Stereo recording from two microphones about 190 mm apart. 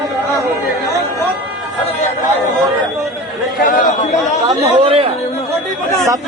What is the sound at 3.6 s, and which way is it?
Chatter, 50° left (ahead or behind).